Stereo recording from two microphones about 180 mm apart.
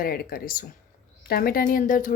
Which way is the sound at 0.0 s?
55° left (ahead or behind).